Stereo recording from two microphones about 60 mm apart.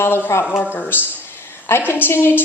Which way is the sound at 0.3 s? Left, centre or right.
Left.